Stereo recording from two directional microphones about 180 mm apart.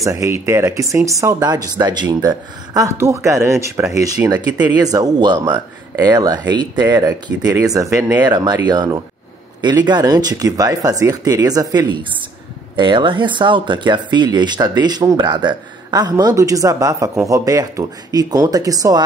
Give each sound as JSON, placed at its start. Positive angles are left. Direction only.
{"t": 0.0, "sound": "speech", "side_deg": -15}